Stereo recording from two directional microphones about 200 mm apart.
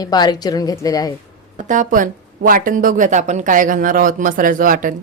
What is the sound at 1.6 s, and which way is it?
Speech, 40° right (ahead or behind).